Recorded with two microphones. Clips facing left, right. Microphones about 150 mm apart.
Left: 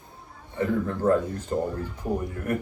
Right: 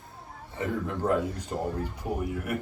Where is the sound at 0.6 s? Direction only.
15° right (ahead or behind).